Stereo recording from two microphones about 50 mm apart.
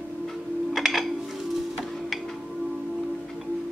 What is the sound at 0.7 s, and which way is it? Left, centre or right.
Music, centre.